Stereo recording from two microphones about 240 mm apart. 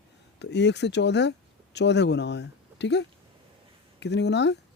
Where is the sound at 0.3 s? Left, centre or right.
Left.